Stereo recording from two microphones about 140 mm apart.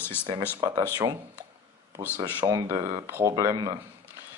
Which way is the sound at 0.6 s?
30° right (ahead or behind).